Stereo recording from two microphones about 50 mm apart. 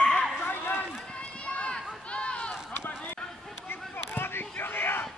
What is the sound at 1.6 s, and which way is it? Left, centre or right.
Run, left.